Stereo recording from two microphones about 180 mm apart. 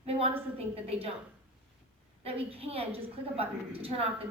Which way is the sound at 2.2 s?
35° right (ahead or behind).